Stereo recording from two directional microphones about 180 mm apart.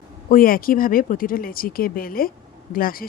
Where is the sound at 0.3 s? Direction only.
50° left (ahead or behind).